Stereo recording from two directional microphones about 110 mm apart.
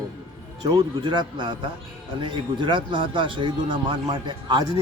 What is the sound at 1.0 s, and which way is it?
Speech, 45° right (ahead or behind).